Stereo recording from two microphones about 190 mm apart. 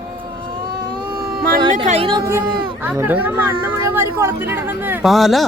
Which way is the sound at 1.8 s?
30° right (ahead or behind).